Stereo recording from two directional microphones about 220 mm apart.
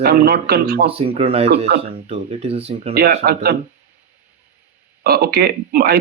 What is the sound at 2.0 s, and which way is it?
Speech, 30° right (ahead or behind).